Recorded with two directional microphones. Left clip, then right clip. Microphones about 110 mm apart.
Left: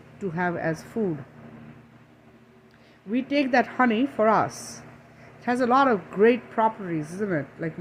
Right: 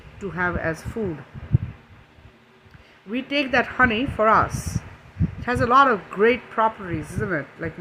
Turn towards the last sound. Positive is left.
turn(degrees=-25)  # may be behind; listen again after turning